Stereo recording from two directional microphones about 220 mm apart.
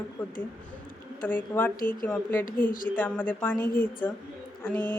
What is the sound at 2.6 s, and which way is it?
Speech, 40° left (ahead or behind).